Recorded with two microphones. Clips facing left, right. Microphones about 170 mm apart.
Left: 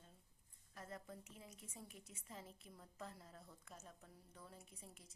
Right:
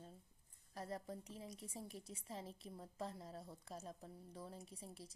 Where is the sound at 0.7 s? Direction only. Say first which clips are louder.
Right 6 dB; 35° right (ahead or behind).